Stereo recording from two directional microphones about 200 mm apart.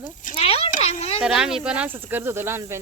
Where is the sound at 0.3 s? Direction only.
30° left (ahead or behind).